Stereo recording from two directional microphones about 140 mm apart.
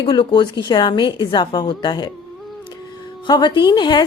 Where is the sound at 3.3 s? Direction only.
30° left (ahead or behind).